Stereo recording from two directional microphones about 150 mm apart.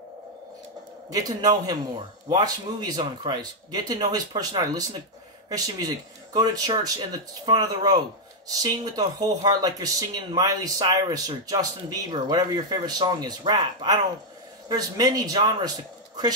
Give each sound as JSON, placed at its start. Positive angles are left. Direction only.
{"t": 1.1, "sound": "speech", "side_deg": -25}